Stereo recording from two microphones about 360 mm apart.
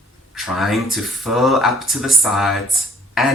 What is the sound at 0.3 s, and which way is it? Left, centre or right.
Speech, centre.